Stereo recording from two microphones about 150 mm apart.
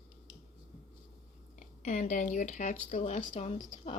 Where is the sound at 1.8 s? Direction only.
55° left (ahead or behind).